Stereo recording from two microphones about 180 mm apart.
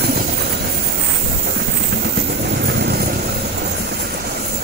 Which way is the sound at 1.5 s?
60° right (ahead or behind).